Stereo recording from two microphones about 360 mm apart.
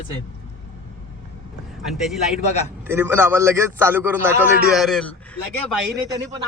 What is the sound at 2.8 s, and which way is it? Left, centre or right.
A man's voice, centre.